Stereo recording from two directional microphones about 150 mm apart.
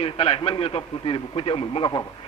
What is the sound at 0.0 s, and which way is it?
A man's voice, 40° left (ahead or behind).